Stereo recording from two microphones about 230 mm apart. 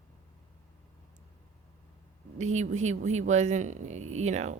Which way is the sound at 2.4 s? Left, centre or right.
Right.